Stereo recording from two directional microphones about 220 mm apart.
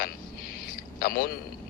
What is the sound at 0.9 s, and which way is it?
Speech, 40° left (ahead or behind).